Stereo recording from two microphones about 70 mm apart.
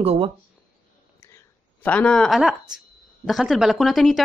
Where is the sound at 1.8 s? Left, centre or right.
Left.